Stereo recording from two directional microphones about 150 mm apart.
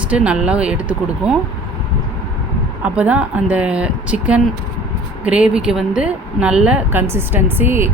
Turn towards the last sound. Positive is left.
turn(degrees=-15)  # may be behind; listen again after turning